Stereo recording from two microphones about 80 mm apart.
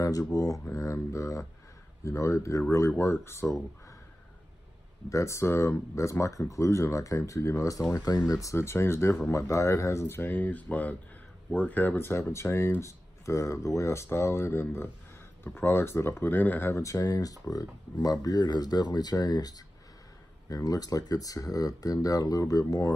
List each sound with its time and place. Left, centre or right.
0.0 s speech: left
5.1 s speech: left
16.7 s speech: left